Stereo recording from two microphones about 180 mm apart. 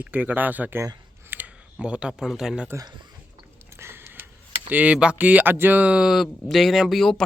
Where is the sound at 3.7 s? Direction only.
15° right (ahead or behind).